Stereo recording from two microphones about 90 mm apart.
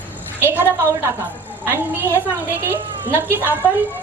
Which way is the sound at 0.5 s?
25° right (ahead or behind).